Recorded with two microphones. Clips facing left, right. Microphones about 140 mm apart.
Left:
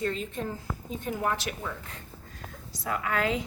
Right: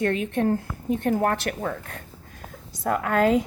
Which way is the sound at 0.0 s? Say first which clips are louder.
Right 8 dB; 65° right (ahead or behind).